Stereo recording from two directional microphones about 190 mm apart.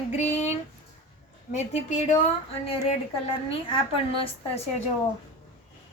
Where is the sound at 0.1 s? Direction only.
35° left (ahead or behind).